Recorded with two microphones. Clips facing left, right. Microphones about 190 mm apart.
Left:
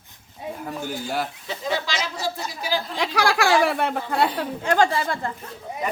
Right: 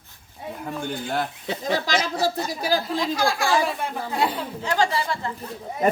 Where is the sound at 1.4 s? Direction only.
50° right (ahead or behind).